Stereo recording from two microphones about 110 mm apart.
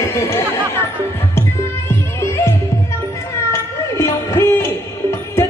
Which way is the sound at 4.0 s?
25° left (ahead or behind).